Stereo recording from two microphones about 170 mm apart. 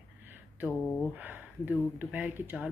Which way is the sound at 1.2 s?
10° right (ahead or behind).